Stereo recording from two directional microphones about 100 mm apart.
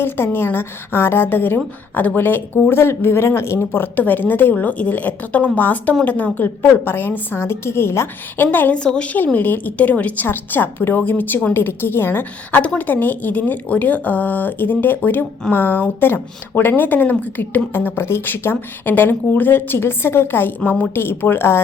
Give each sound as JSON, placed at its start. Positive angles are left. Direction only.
{"t": 0.0, "sound": "a woman's voice", "side_deg": 25}